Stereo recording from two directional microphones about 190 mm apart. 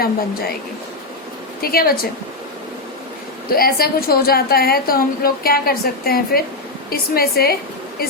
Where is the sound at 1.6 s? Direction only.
50° left (ahead or behind).